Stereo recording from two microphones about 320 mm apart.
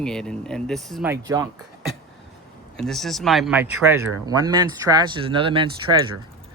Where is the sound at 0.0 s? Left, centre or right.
Centre.